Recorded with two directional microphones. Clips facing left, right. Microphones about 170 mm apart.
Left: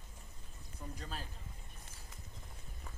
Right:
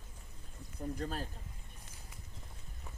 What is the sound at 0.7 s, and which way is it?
Speech, 50° right (ahead or behind).